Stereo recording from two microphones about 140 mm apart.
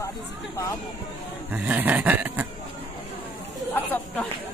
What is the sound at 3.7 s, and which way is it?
Speech, 15° left (ahead or behind).